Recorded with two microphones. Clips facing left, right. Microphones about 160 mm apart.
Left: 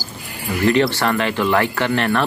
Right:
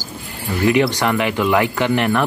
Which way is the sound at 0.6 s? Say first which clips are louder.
Right 1 dB; 15° right (ahead or behind).